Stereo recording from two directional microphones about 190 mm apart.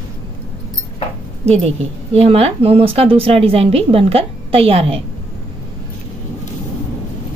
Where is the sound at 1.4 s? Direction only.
35° right (ahead or behind).